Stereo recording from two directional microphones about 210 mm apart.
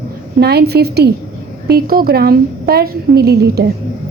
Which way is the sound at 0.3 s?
50° right (ahead or behind).